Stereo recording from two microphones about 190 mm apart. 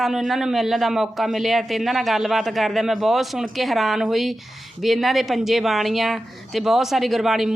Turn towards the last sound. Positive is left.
turn(degrees=0)  # may be behind; listen again after turning